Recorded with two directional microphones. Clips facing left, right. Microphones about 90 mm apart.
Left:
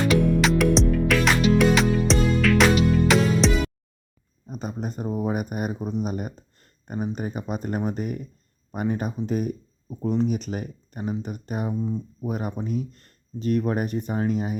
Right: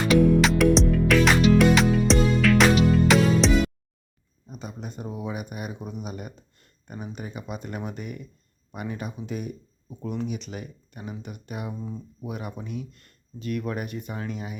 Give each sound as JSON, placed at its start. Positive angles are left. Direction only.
{"t": 0.1, "sound": "music", "side_deg": 0}
{"t": 4.4, "sound": "speech", "side_deg": 45}
{"t": 11.7, "sound": "speech", "side_deg": 20}
{"t": 12.2, "sound": "speech", "side_deg": 40}